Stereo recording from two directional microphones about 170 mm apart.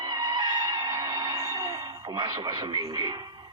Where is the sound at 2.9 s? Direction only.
25° right (ahead or behind).